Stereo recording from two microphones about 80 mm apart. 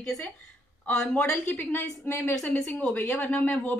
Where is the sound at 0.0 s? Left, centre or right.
Centre.